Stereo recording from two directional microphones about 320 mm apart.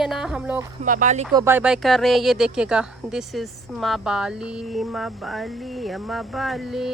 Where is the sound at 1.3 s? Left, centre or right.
Centre.